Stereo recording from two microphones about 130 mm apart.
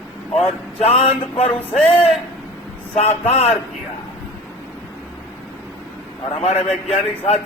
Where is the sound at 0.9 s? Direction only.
55° left (ahead or behind).